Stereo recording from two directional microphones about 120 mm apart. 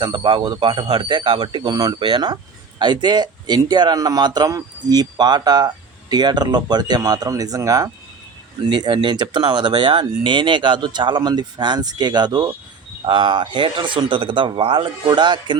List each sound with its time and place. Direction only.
0.0 s speech: 40° right (ahead or behind)